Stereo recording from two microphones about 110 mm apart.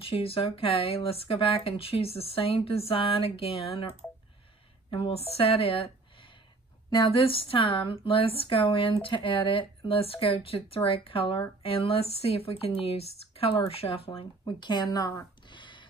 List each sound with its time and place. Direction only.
0.0 s speech: 60° left (ahead or behind)
4.9 s speech: 60° left (ahead or behind)
6.9 s speech: 50° left (ahead or behind)
14.4 s speech: 40° left (ahead or behind)
15.5 s a sound: 45° left (ahead or behind)